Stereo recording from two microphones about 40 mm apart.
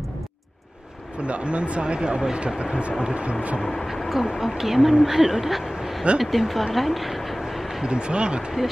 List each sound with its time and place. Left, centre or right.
1.2 s speech: right
3.7 s a woman's voice: centre
7.8 s speech: right